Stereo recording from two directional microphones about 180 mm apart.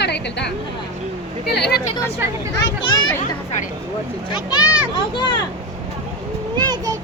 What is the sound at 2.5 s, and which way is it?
Speech, 25° left (ahead or behind).